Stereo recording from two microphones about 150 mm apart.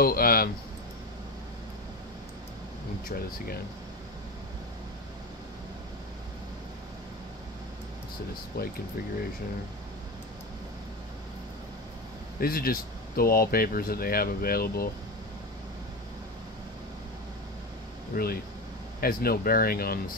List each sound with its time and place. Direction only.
0.0 s a sound: 80° left
3.1 s speech: 80° left
8.5 s speech: 85° left
12.4 s speech: 80° left
18.1 s speech: 85° left